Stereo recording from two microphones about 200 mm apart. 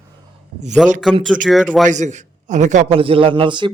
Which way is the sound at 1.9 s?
35° right (ahead or behind).